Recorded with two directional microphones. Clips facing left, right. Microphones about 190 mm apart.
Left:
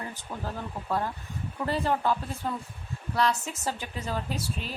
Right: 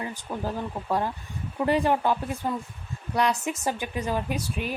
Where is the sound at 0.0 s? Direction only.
15° right (ahead or behind).